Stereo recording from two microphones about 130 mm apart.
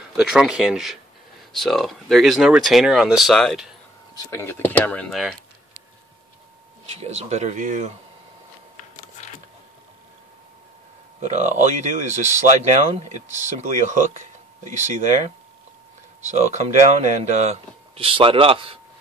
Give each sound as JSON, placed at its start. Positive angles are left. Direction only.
{"t": 0.2, "sound": "speech", "side_deg": -5}
{"t": 4.1, "sound": "speech", "side_deg": 20}
{"t": 7.0, "sound": "speech", "side_deg": -55}
{"t": 11.1, "sound": "speech", "side_deg": -65}
{"t": 17.9, "sound": "a man's voice", "side_deg": -45}